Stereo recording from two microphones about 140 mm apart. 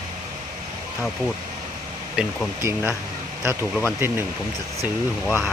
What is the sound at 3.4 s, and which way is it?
Speech, 15° right (ahead or behind).